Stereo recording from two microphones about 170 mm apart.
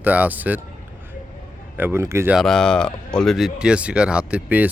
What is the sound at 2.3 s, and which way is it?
Speech, centre (ahead or behind).